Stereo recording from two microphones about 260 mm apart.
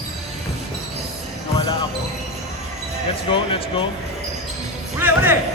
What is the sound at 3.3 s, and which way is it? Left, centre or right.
Speech, centre.